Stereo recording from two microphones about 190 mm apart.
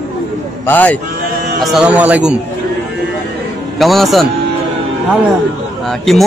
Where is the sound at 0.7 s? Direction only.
10° left (ahead or behind).